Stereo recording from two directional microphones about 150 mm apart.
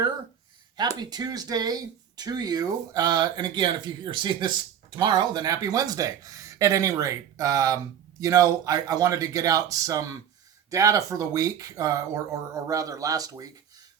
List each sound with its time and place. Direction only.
0.8 s speech: 25° right (ahead or behind)